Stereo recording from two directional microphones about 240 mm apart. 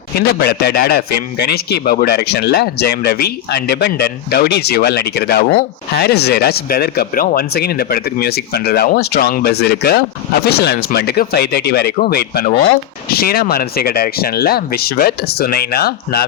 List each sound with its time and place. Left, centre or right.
0.2 s a man's voice: left